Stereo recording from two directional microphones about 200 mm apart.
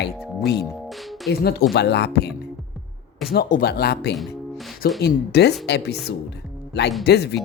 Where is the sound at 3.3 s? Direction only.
45° left (ahead or behind).